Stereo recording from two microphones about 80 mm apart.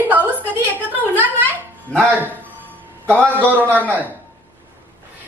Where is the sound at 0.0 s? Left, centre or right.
Right.